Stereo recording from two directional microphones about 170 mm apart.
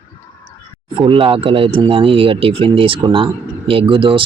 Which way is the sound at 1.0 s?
30° right (ahead or behind).